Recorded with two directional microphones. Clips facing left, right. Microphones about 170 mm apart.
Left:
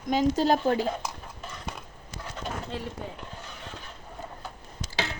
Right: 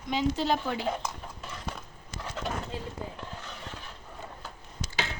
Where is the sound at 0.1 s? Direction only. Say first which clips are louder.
Left 4 dB; 45° left (ahead or behind).